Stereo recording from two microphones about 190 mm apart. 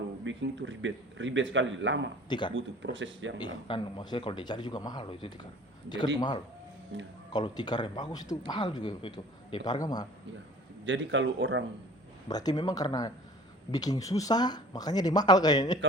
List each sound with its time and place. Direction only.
0.3 s a man's voice: 80° right
3.7 s speech: 25° left (ahead or behind)
6.9 s a man's voice: 70° right (ahead or behind)
7.3 s speech: 20° left (ahead or behind)
10.8 s a man's voice: 75° right (ahead or behind)
12.3 s speech: 20° left (ahead or behind)